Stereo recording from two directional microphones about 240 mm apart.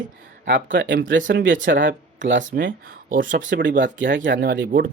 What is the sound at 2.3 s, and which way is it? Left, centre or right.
Speech, right.